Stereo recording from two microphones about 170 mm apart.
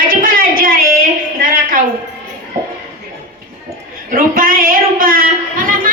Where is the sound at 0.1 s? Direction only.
60° right (ahead or behind).